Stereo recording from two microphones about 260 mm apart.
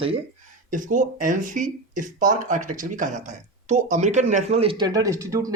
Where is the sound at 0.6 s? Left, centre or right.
Right.